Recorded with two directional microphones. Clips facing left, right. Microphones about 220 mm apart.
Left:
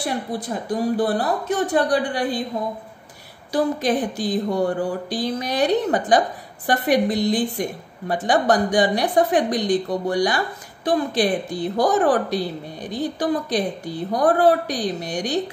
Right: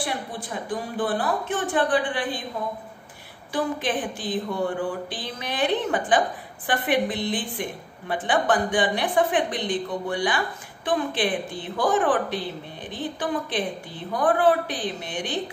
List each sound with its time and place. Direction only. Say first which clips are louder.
0.0 s a woman's voice: left 5 dB; 40° left (ahead or behind)
3.5 s a woman's voice: left 5 dB; 40° left (ahead or behind)